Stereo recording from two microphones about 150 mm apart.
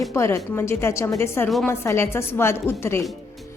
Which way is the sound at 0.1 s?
20° left (ahead or behind).